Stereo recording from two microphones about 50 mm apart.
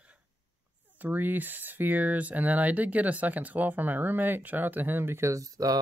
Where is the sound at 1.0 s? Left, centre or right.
Right.